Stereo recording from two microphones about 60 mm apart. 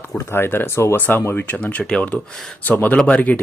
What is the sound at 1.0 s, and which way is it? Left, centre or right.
Speech, left.